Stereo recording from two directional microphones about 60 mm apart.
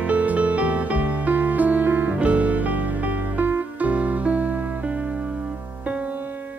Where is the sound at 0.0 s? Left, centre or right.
Right.